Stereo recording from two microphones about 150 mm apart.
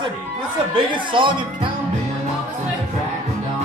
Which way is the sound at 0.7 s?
30° right (ahead or behind).